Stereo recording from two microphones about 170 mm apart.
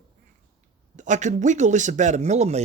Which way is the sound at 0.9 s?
45° right (ahead or behind).